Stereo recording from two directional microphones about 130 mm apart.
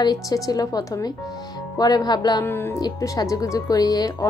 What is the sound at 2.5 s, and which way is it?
Speech, 15° left (ahead or behind).